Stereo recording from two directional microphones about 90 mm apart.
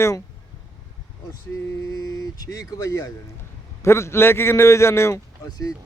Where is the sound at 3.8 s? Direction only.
30° left (ahead or behind).